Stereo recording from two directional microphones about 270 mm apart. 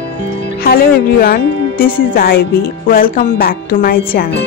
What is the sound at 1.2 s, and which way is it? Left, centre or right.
Speech, left.